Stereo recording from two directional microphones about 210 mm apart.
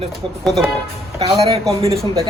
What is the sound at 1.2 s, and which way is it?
Speech, 25° right (ahead or behind).